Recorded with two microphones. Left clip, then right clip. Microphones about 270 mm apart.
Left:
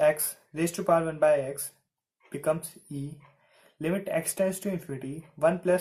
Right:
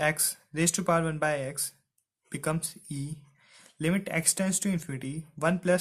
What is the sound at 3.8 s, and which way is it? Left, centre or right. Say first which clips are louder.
Speech: left 1 dB; right.